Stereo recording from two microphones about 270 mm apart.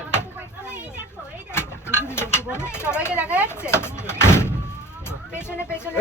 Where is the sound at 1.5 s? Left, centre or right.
Centre.